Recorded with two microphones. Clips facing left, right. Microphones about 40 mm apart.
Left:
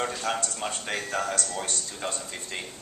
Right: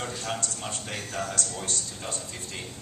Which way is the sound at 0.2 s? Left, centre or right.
Left.